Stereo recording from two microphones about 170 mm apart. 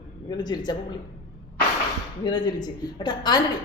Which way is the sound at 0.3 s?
25° left (ahead or behind).